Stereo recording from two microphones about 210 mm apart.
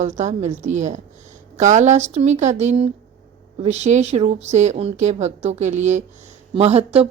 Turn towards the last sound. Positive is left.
turn(degrees=-30)  # may be behind; listen again after turning